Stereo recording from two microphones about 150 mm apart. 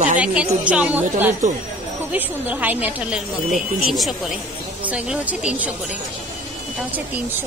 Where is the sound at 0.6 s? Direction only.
10° right (ahead or behind).